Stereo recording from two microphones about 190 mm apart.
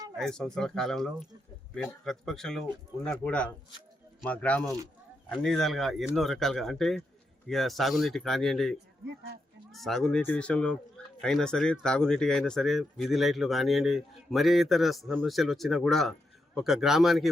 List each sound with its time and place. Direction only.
0.2 s speech: 5° left (ahead or behind)
9.0 s speech: 65° right (ahead or behind)
9.7 s speech: centre (ahead or behind)